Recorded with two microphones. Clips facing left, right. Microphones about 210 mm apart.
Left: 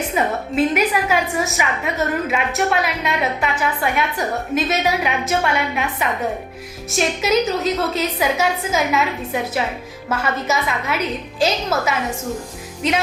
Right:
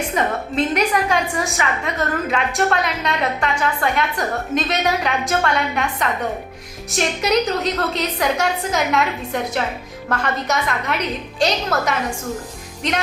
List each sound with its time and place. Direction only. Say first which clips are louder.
0.2 s a woman's voice: left 3 dB; 5° left (ahead or behind)